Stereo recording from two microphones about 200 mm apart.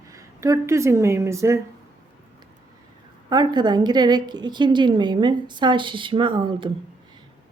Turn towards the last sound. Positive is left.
turn(degrees=-25)  # may be behind; listen again after turning